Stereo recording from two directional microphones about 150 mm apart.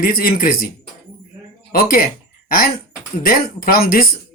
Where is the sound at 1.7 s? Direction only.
75° left (ahead or behind).